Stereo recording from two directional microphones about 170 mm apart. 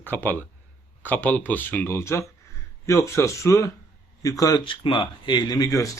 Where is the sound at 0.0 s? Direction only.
10° left (ahead or behind).